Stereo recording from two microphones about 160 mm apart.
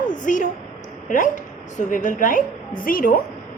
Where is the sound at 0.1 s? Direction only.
55° left (ahead or behind).